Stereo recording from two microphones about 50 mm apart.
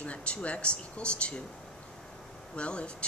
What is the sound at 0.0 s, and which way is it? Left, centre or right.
Speech, left.